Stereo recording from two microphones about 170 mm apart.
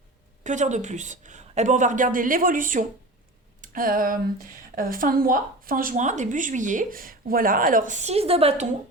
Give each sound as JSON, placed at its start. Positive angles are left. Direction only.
{"t": 0.4, "sound": "speech", "side_deg": -45}